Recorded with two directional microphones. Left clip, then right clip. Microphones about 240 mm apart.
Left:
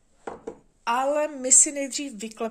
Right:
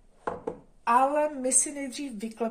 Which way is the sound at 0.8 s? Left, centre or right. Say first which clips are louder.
Right 1 dB; left.